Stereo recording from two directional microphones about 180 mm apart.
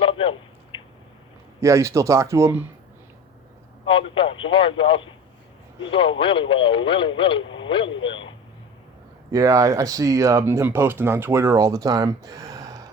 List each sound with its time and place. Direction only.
0.0 s a sound: 30° left (ahead or behind)
1.6 s speech: 15° right (ahead or behind)
3.8 s speech: 30° left (ahead or behind)
9.3 s speech: 20° right (ahead or behind)